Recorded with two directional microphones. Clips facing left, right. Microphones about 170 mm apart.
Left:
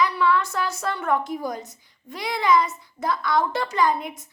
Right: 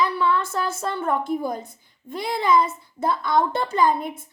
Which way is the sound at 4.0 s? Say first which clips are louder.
Right 3 dB; 55° right (ahead or behind).